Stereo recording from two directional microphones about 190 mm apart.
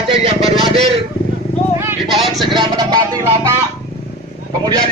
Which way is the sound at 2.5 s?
25° right (ahead or behind).